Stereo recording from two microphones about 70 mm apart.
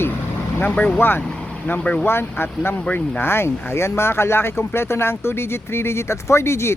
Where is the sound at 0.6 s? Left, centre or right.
Left.